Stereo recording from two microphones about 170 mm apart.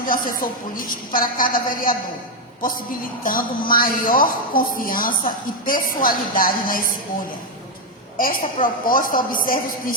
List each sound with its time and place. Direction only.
0.0 s a woman's voice: 55° left (ahead or behind)
8.2 s a woman's voice: 55° left (ahead or behind)